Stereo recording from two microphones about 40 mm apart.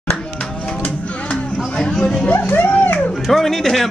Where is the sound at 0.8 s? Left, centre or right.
Left.